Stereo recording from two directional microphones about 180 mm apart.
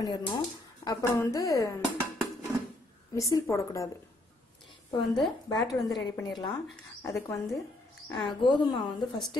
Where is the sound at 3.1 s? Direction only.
20° left (ahead or behind).